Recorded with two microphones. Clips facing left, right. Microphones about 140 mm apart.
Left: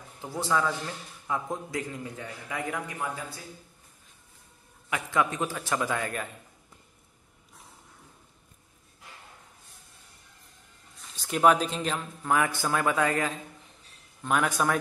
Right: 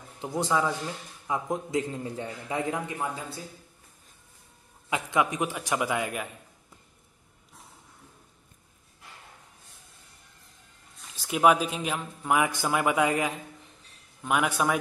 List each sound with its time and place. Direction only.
0.2 s a man's voice: 20° right (ahead or behind)
4.8 s speech: 20° right (ahead or behind)
11.1 s speech: 5° right (ahead or behind)